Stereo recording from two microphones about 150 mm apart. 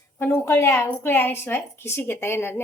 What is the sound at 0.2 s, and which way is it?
A woman's voice, 20° left (ahead or behind).